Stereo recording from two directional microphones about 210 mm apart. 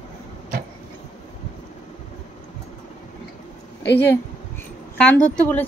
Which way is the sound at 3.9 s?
10° left (ahead or behind).